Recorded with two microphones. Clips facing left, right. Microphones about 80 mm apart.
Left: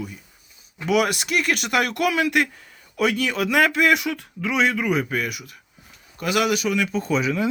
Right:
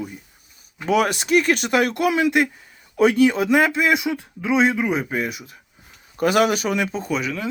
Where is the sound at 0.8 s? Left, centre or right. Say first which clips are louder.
Right 1 dB; right.